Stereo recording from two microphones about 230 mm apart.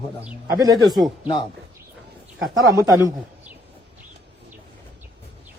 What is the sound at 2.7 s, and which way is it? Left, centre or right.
Speech, centre.